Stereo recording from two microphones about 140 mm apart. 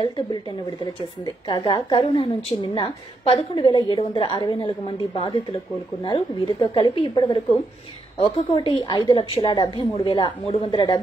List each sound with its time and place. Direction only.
1.2 s a woman's voice: 35° left (ahead or behind)